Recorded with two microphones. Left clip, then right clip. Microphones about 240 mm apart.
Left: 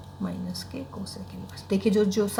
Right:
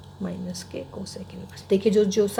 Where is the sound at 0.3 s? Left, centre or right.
Right.